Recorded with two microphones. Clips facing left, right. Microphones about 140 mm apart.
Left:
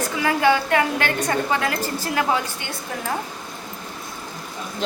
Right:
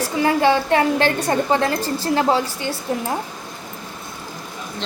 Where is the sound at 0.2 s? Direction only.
30° right (ahead or behind).